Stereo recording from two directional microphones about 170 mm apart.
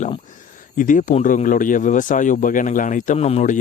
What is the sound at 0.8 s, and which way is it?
Speech, 50° left (ahead or behind).